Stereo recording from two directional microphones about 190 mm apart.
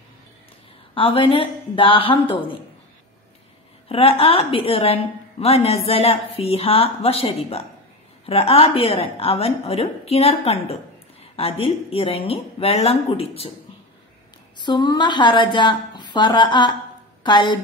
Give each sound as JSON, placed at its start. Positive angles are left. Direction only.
{"t": 0.9, "sound": "speech", "side_deg": 30}
{"t": 3.9, "sound": "a woman's voice", "side_deg": 30}
{"t": 14.6, "sound": "a woman's voice", "side_deg": 25}